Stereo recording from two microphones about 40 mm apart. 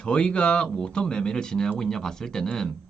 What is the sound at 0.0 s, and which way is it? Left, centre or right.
Speech, left.